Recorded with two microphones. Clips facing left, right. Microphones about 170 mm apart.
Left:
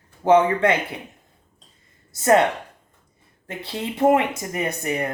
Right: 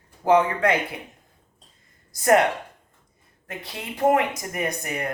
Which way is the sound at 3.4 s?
30° left (ahead or behind).